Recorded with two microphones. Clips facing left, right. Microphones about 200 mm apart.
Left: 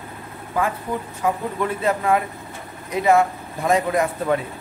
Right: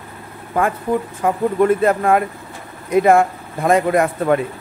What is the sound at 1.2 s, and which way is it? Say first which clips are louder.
A man's voice: right 7 dB; 50° right (ahead or behind).